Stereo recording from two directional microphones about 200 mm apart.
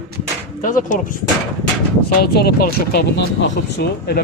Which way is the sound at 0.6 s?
40° left (ahead or behind).